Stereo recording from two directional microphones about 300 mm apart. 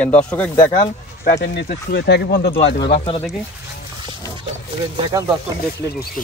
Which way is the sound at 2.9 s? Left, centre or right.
Centre.